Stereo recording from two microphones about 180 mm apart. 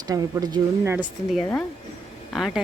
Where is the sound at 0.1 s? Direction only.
20° right (ahead or behind).